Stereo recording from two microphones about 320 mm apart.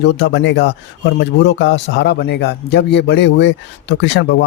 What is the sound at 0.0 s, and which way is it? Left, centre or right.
Speech, left.